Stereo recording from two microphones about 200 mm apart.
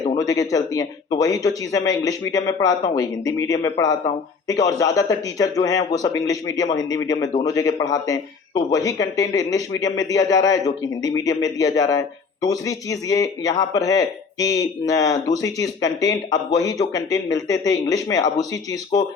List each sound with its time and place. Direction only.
0.2 s speech: 20° left (ahead or behind)